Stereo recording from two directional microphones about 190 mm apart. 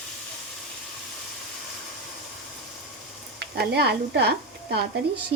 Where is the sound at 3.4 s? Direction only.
60° right (ahead or behind).